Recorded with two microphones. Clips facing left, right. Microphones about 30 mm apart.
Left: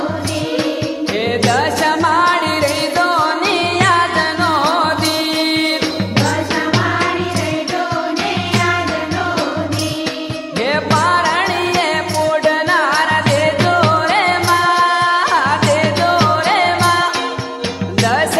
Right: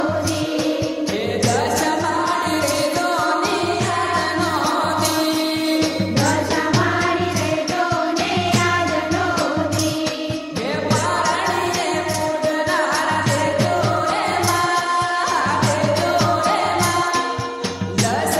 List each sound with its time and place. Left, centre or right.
1.4 s music: left
2.6 s music: left
3.7 s music: left
4.4 s music: left
10.6 s music: left
12.8 s music: left
14.9 s music: left
15.6 s music: left
16.0 s music: left